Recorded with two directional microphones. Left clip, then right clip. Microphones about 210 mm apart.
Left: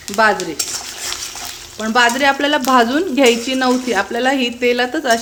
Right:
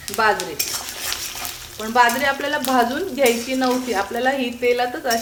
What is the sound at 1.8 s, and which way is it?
Speech, 55° left (ahead or behind).